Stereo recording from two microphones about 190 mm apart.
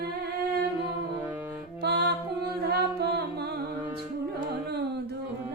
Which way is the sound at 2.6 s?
55° right (ahead or behind).